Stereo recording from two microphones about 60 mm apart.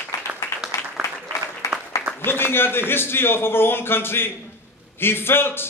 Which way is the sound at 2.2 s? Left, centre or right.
Left.